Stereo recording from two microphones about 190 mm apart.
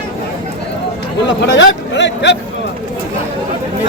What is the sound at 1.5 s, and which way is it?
Speech, 70° left (ahead or behind).